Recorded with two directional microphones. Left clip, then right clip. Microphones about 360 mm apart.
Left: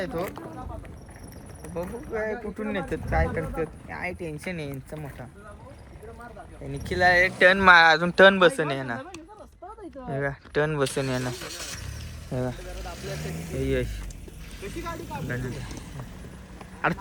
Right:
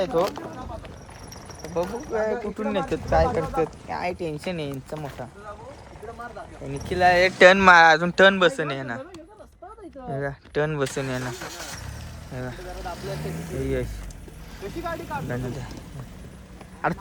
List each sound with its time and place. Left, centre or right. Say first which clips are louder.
0.3 s speech: right 3 dB; right
1.7 s speech: right 5 dB; centre
6.7 s speech: right 2 dB; centre
7.2 s speech: right 4 dB; centre
11.3 s vehicle: right 1 dB; right
12.3 s speech: left 4 dB; centre
12.5 s vehicle: right 4 dB; right
13.3 s speech: left 2 dB; centre
14.6 s speech: right 4 dB; centre
14.9 s speech: right 3 dB; centre
16.8 s speech: even; centre